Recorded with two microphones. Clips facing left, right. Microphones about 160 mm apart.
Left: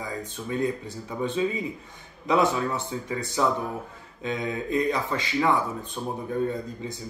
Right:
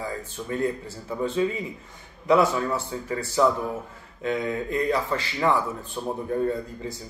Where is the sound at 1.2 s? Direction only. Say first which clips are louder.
Right 1 dB; 20° left (ahead or behind).